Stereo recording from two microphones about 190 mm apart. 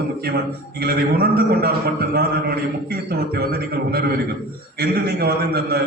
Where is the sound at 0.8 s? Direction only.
55° right (ahead or behind).